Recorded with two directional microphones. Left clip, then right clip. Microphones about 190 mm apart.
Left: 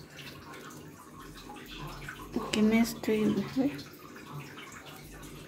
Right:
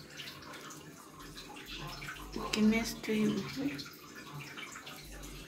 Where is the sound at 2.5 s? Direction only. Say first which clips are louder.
Left 4 dB; 50° left (ahead or behind).